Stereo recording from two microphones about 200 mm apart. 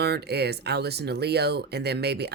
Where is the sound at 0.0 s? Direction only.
55° right (ahead or behind).